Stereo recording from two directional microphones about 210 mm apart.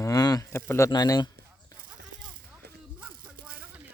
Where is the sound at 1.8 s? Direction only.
40° right (ahead or behind).